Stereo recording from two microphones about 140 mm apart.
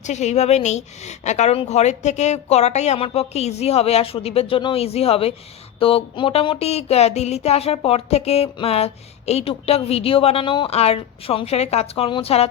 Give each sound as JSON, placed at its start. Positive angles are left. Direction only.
{"t": 0.0, "sound": "a woman's voice", "side_deg": 55}